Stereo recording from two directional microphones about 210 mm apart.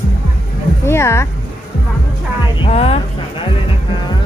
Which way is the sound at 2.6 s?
30° left (ahead or behind).